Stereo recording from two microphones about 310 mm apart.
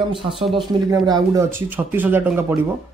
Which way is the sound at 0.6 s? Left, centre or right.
Centre.